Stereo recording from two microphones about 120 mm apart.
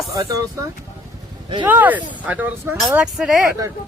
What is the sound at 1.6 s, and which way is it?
Speech, 15° right (ahead or behind).